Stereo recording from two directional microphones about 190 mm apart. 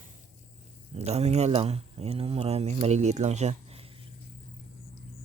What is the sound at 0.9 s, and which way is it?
Speech, 35° right (ahead or behind).